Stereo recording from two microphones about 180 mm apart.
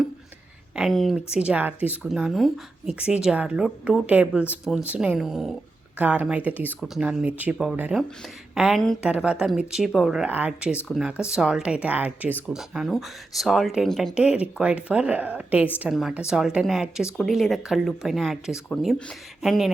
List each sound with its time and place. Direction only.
0.8 s speech: centre (ahead or behind)